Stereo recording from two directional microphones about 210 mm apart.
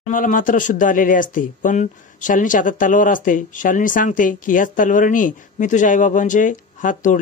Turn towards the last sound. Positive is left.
turn(degrees=40)  # may be behind; listen again after turning